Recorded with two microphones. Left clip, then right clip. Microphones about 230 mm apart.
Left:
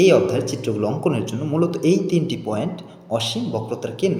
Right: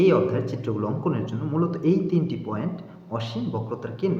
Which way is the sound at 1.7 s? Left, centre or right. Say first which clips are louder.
Left 4 dB; centre.